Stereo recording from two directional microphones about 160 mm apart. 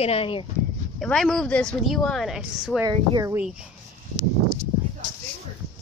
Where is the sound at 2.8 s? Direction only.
25° right (ahead or behind).